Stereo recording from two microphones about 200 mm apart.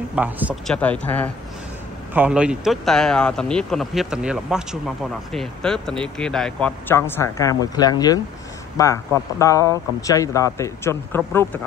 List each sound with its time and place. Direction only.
0.1 s speech: 5° right (ahead or behind)
0.7 s speech: 5° left (ahead or behind)
2.1 s speech: 5° right (ahead or behind); by 11.6 s 10° left (ahead or behind)